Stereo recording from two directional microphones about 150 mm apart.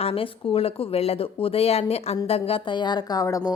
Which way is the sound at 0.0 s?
40° left (ahead or behind).